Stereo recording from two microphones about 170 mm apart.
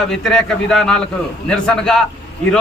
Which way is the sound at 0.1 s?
Centre (ahead or behind).